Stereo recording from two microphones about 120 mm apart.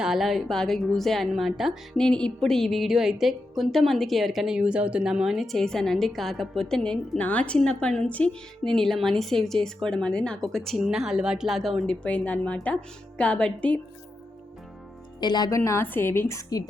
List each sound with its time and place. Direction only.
0.0 s a woman's voice: centre (ahead or behind)
12.0 s speech: 10° left (ahead or behind)
15.2 s a woman's voice: 35° left (ahead or behind); by 16.4 s 20° left (ahead or behind)